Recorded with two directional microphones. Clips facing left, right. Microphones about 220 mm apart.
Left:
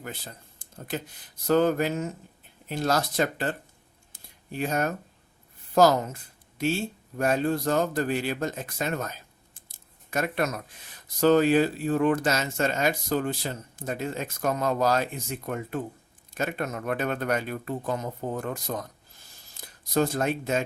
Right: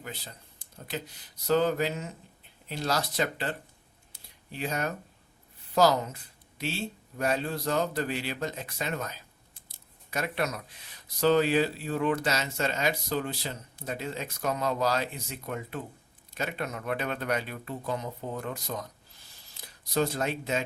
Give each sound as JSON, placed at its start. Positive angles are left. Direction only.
{"t": 0.6, "sound": "speech", "side_deg": 50}
{"t": 4.1, "sound": "a sound", "side_deg": 50}
{"t": 5.7, "sound": "speech", "side_deg": 50}
{"t": 9.6, "sound": "keys jangling", "side_deg": 50}
{"t": 11.2, "sound": "speech", "side_deg": 50}